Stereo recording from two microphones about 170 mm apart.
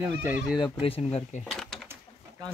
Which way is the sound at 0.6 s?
35° left (ahead or behind).